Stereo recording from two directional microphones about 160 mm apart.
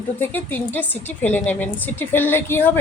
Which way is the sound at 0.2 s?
10° left (ahead or behind).